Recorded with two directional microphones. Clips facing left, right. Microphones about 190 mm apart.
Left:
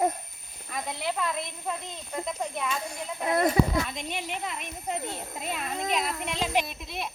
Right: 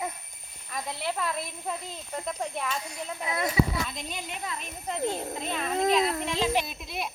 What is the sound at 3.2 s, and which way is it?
Speech, 45° left (ahead or behind).